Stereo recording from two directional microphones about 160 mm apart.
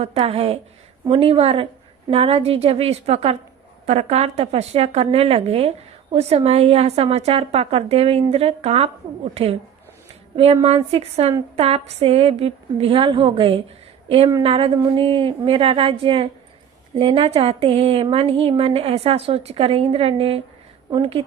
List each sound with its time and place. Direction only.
0.0 s a woman's voice: 40° right (ahead or behind)